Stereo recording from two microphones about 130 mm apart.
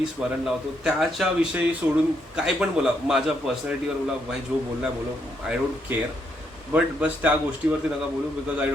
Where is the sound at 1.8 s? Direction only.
15° right (ahead or behind).